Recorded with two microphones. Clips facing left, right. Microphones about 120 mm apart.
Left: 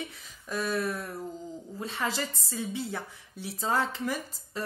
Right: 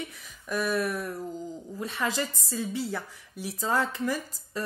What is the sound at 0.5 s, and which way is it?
A woman's voice, 30° left (ahead or behind).